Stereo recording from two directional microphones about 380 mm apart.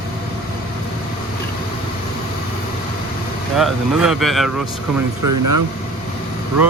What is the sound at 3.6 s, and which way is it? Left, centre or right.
Speech, centre.